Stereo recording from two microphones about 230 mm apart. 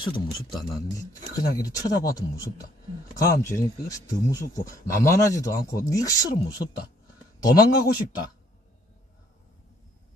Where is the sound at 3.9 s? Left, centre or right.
Centre.